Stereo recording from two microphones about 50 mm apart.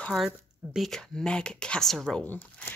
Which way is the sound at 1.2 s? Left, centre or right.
Centre.